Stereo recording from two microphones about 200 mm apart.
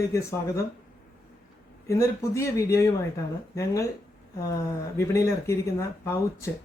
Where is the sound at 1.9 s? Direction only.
15° left (ahead or behind).